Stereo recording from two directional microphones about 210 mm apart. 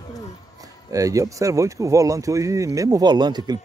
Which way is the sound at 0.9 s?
15° right (ahead or behind).